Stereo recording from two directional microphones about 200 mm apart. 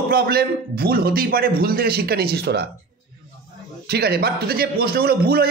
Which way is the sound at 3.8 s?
50° right (ahead or behind).